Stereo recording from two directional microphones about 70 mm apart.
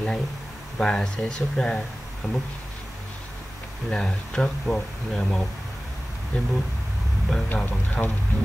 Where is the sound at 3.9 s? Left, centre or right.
Centre.